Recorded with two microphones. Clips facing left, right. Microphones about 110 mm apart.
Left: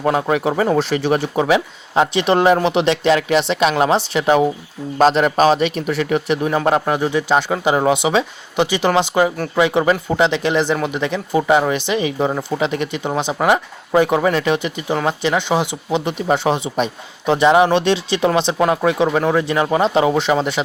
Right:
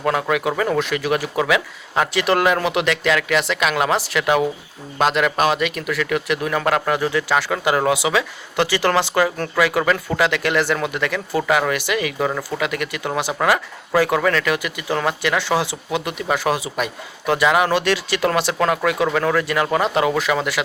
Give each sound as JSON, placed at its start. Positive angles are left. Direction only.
{"t": 0.0, "sound": "speech", "side_deg": 25}